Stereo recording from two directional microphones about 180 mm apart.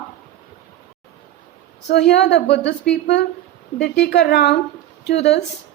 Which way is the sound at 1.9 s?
70° left (ahead or behind).